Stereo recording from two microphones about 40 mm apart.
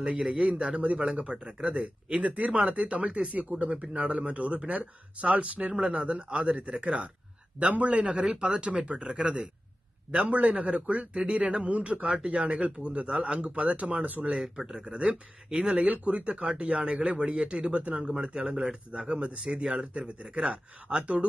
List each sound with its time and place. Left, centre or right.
0.3 s speech: right
1.7 s speech: right
8.1 s speech: centre
11.7 s speech: right
12.2 s speech: right
14.3 s speech: centre
14.9 s speech: right
15.9 s speech: right
18.0 s speech: centre
19.6 s speech: centre
19.9 s speech: right
21.0 s speech: right